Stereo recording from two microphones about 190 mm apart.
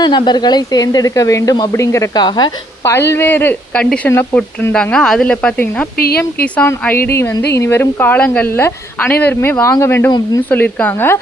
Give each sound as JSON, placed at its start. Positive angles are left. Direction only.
{"t": 0.0, "sound": "speech", "side_deg": 25}
{"t": 6.0, "sound": "speech", "side_deg": 55}
{"t": 6.4, "sound": "speech", "side_deg": 10}